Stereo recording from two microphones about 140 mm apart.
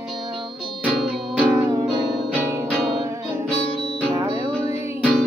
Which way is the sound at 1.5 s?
25° right (ahead or behind).